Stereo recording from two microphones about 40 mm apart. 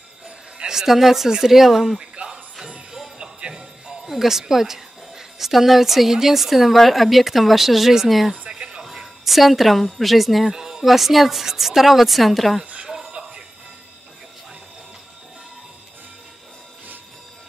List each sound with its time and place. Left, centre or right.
0.7 s a woman's voice: centre
2.2 s music: right
2.9 s music: centre
4.0 s a woman's voice: centre
8.3 s a sound: right
8.9 s speech: centre
10.5 s speech: centre
10.9 s a woman's voice: centre
12.8 s music: centre